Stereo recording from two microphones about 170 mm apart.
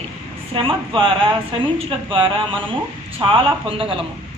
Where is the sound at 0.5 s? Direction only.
30° right (ahead or behind).